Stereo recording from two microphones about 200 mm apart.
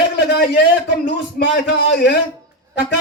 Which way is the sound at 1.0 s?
60° left (ahead or behind).